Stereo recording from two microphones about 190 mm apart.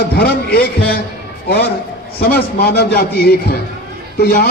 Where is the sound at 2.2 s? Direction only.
55° left (ahead or behind).